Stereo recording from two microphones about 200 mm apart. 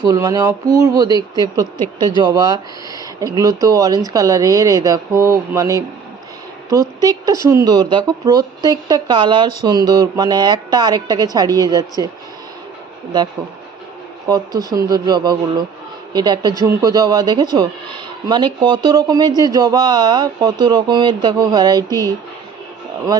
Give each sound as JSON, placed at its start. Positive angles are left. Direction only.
{"t": 0.0, "sound": "a woman's voice", "side_deg": -15}
{"t": 14.3, "sound": "a woman's voice", "side_deg": -20}